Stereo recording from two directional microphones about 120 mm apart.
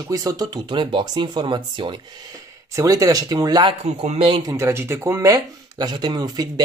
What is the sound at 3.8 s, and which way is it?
Speech, 60° right (ahead or behind).